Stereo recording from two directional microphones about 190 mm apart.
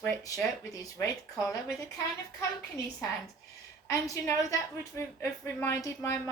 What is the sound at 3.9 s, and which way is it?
A woman's voice, 15° left (ahead or behind).